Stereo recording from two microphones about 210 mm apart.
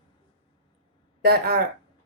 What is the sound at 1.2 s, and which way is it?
Speech, 45° right (ahead or behind).